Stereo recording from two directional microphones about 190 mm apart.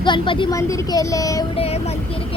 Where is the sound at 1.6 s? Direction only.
35° left (ahead or behind).